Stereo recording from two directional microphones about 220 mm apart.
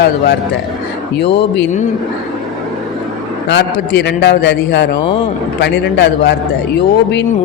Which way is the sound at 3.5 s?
50° left (ahead or behind).